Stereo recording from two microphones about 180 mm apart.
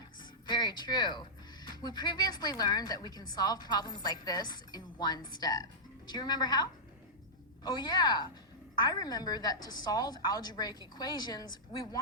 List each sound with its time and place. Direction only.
0.4 s a woman's voice: 25° left (ahead or behind)